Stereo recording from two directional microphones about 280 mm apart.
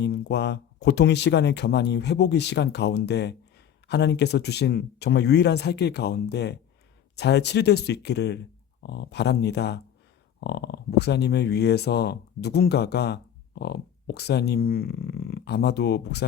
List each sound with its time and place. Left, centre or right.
0.0 s speech: left